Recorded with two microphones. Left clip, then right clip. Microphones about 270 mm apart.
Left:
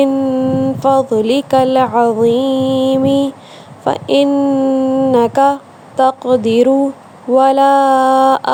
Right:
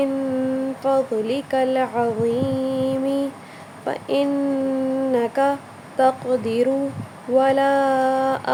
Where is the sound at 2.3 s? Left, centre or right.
Centre.